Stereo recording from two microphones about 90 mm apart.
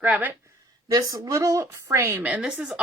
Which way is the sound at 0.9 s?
40° right (ahead or behind).